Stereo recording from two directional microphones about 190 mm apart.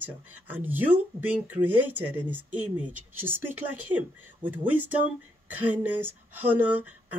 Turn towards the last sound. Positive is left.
turn(degrees=-10)  # may be behind; listen again after turning